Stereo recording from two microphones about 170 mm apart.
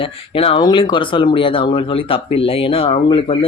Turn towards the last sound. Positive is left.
turn(degrees=35)  # may be behind; listen again after turning